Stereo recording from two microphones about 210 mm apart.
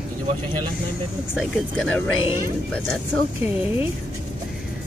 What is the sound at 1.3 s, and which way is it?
Speech, centre (ahead or behind).